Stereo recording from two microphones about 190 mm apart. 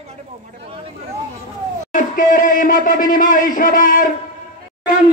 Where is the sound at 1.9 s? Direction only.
45° left (ahead or behind).